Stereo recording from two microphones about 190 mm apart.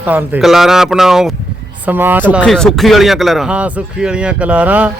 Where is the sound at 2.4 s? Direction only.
Centre (ahead or behind).